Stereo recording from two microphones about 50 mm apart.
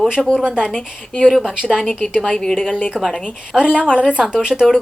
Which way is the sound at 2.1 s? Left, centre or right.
Centre.